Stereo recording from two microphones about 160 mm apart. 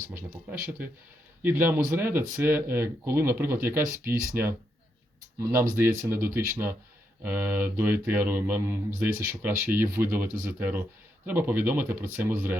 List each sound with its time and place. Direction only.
0.6 s speech: 10° right (ahead or behind)